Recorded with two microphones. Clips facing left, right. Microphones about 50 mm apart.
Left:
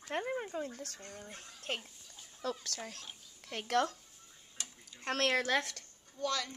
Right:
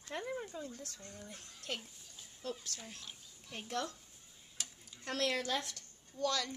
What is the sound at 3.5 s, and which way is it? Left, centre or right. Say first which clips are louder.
Speech: left 8 dB; left.